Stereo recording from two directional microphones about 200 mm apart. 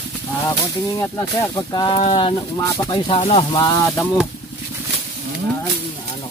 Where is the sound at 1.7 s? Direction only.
25° left (ahead or behind).